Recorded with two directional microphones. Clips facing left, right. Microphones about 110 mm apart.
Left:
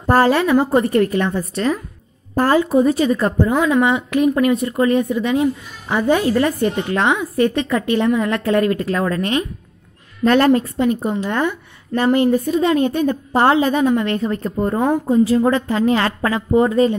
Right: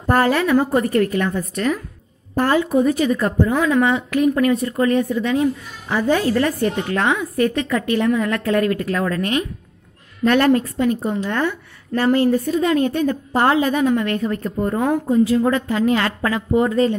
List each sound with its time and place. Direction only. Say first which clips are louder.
0.0 s speech: left 3 dB; 30° left (ahead or behind)
3.5 s speech: left 2 dB; 15° left (ahead or behind)